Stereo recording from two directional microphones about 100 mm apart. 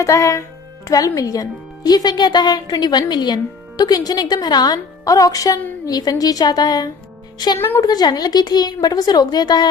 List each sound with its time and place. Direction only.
0.0 s speech: 30° left (ahead or behind)